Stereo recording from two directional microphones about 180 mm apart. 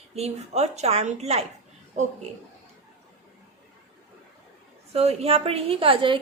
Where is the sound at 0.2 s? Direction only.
35° right (ahead or behind).